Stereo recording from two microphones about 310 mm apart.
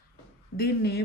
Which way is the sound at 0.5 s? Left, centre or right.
Left.